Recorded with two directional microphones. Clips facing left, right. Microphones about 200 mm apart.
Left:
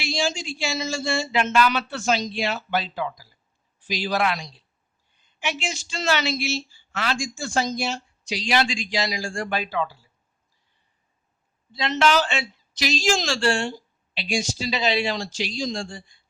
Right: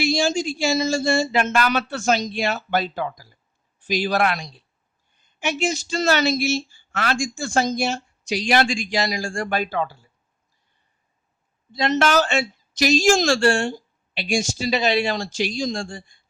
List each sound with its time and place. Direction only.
0.0 s speech: 45° right (ahead or behind)
11.7 s speech: 45° right (ahead or behind)